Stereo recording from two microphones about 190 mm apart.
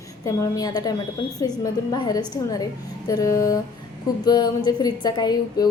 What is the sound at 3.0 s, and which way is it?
Music, 20° left (ahead or behind).